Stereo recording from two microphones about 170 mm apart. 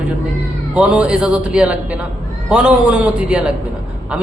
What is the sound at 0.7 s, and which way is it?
A man's voice, 5° right (ahead or behind).